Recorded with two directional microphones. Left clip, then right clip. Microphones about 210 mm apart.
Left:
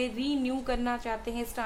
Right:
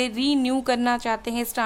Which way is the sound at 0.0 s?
50° right (ahead or behind).